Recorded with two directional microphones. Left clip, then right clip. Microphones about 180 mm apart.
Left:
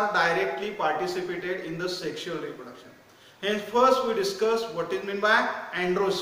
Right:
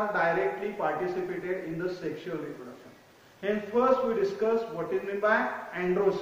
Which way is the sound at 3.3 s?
15° left (ahead or behind).